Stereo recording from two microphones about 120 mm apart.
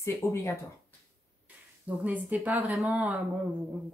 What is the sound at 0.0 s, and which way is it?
Speech, 25° left (ahead or behind).